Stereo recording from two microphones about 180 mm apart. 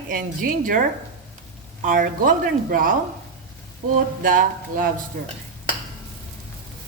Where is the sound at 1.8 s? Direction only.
50° right (ahead or behind).